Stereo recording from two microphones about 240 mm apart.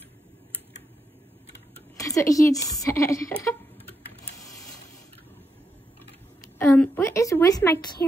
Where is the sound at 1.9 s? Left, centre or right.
Centre.